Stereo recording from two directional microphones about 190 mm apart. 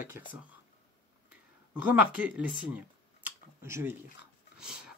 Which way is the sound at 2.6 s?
10° right (ahead or behind).